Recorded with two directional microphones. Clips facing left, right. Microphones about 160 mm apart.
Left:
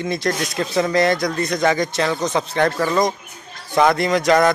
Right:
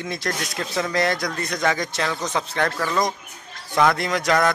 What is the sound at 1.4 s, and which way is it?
Speech, 10° left (ahead or behind).